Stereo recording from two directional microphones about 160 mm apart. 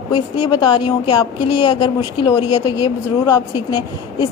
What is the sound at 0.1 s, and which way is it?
A man's voice, 30° left (ahead or behind).